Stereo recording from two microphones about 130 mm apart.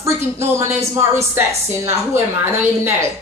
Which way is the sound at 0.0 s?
20° right (ahead or behind).